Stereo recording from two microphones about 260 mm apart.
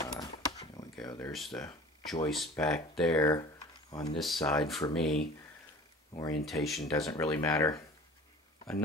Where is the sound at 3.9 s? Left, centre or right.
Centre.